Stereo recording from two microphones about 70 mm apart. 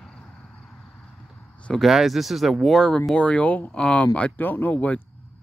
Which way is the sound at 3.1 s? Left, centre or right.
Centre.